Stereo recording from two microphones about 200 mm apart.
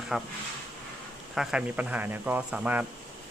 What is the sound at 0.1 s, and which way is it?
Speech, 5° right (ahead or behind).